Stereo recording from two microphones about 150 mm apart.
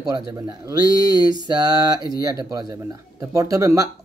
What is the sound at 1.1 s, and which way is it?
Speech, 30° right (ahead or behind).